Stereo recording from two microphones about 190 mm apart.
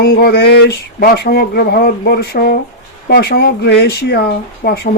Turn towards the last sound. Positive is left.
turn(degrees=55)  # may be behind; listen again after turning